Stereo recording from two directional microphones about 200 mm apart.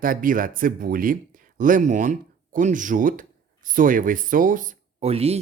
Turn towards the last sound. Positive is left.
turn(degrees=-30)  # may be behind; listen again after turning